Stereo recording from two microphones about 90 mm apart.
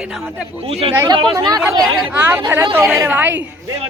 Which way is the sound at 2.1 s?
20° right (ahead or behind).